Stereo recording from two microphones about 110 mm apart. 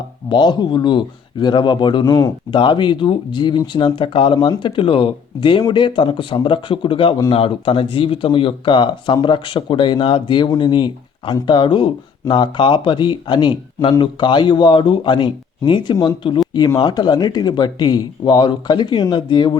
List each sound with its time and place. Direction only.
0.3 s speech: 45° left (ahead or behind)